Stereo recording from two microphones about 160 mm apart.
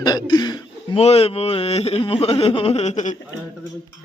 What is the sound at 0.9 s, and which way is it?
Speech, 40° left (ahead or behind).